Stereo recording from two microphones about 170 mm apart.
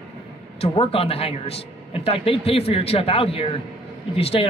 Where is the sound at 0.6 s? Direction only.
35° left (ahead or behind).